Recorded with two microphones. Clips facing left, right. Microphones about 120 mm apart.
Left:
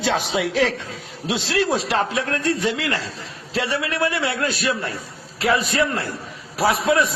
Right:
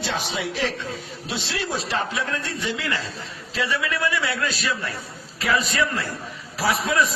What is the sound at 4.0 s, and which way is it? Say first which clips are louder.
Speech: left 3 dB; 60° left (ahead or behind).